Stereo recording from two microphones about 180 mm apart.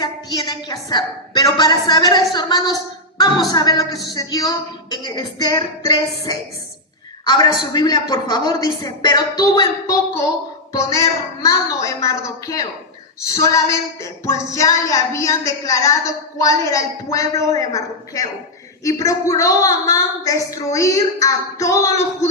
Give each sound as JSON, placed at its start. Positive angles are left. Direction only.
{"t": 0.0, "sound": "a woman's voice", "side_deg": 20}